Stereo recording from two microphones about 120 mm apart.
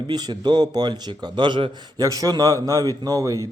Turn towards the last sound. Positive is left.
turn(degrees=-30)  # may be behind; listen again after turning